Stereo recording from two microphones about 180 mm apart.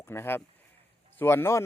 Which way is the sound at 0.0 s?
15° left (ahead or behind).